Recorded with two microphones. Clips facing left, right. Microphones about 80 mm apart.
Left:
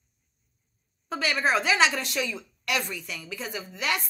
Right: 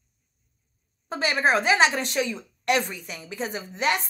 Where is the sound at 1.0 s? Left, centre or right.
Right.